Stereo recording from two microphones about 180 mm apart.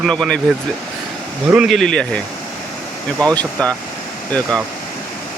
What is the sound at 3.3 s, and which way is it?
Speech, 5° left (ahead or behind).